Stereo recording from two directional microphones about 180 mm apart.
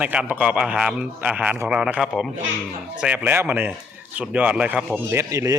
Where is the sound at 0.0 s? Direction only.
10° right (ahead or behind).